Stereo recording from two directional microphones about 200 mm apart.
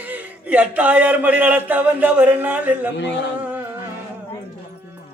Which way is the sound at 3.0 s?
60° left (ahead or behind).